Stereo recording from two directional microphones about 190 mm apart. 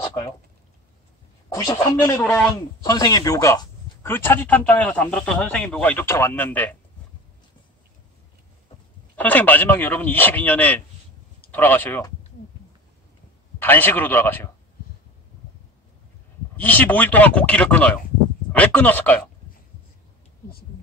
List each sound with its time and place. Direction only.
0.0 s a sound: 25° left (ahead or behind)
1.5 s speech: 20° left (ahead or behind)
2.8 s speech: 20° left (ahead or behind)
9.1 s speech: 10° left (ahead or behind)
13.6 s speech: 10° left (ahead or behind)
16.5 s speech: 10° left (ahead or behind)